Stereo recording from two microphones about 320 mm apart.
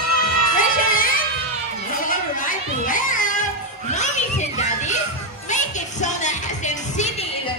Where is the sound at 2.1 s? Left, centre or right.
Left.